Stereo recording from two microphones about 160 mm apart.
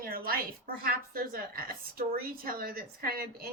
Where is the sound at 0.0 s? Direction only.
65° right (ahead or behind).